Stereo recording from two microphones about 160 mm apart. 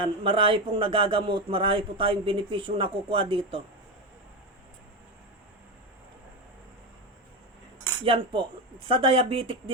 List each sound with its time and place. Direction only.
0.0 s speech: 35° right (ahead or behind)
8.0 s speech: 35° right (ahead or behind)